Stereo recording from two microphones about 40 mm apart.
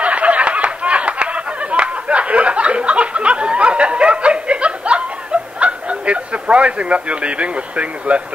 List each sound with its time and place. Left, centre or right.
0.0 s snicker: right